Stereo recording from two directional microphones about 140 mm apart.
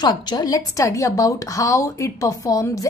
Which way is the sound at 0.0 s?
30° left (ahead or behind).